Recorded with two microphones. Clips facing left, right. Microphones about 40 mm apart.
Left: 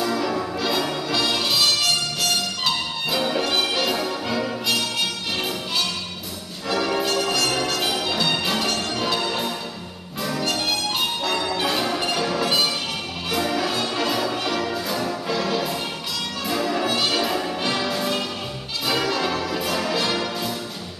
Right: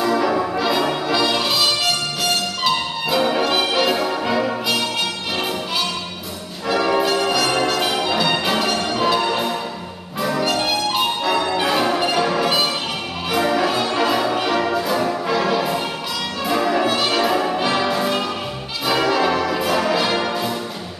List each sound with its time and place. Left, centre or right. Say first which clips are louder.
0.0 s brass instrument: right 5 dB; centre
1.1 s music: right 2 dB; centre
3.1 s music: right 5 dB; centre
6.7 s music: right 5 dB; centre
18.9 s brass instrument: right 5 dB; centre